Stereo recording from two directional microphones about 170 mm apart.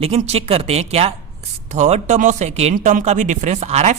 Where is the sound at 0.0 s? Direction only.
40° right (ahead or behind).